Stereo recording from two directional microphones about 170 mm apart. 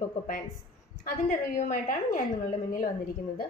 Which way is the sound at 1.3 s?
50° left (ahead or behind).